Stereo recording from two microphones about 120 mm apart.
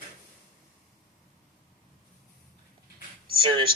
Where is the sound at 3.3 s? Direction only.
45° right (ahead or behind).